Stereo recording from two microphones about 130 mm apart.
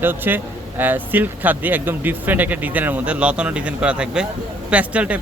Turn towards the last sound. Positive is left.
turn(degrees=-10)  # may be behind; listen again after turning